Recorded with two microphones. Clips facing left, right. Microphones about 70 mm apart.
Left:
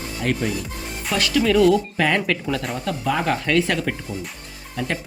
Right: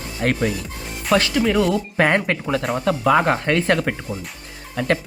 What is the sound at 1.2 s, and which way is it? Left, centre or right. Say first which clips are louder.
Speech: even; right.